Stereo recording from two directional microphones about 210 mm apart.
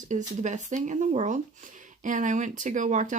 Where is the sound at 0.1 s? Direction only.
35° right (ahead or behind).